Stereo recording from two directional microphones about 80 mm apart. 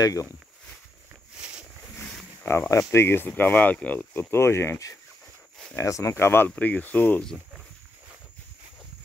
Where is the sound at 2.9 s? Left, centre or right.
Left.